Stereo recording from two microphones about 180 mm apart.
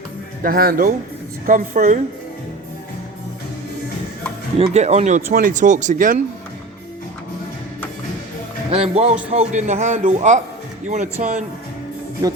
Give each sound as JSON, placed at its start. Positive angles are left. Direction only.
{"t": 0.4, "sound": "speech", "side_deg": -55}
{"t": 4.5, "sound": "speech", "side_deg": -35}
{"t": 8.7, "sound": "a man's voice", "side_deg": -35}